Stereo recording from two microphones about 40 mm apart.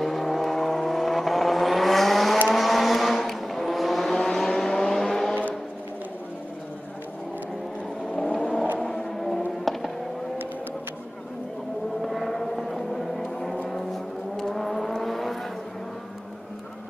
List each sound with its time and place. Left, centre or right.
0.0 s vehicle: centre
8.3 s vehicle: left
8.7 s vehicle: centre
12.0 s gong: centre
13.7 s vehicle: centre